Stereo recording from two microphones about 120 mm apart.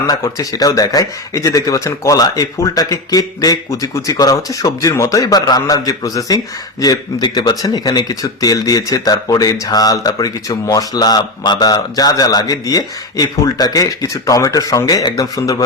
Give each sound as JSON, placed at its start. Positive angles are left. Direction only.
{"t": 0.1, "sound": "speech", "side_deg": 30}